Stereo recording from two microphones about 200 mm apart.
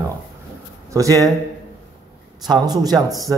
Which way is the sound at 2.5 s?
20° right (ahead or behind).